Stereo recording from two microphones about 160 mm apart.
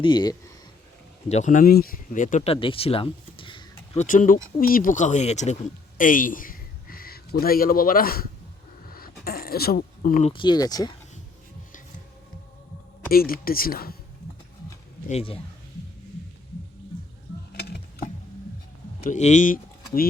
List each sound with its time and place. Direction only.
0.0 s speech: 30° left (ahead or behind)
1.3 s speech: 50° left (ahead or behind)
1.7 s speech: 65° left (ahead or behind)
2.5 s speech: 35° left (ahead or behind)
3.9 s speech: 55° left (ahead or behind)
6.0 s a man's voice: 60° left (ahead or behind)
8.9 s a sound: 65° left (ahead or behind)
10.2 s speech: 30° left (ahead or behind)
13.1 s speech: 65° left (ahead or behind)
15.1 s speech: 35° left (ahead or behind)
19.0 s speech: 50° left (ahead or behind)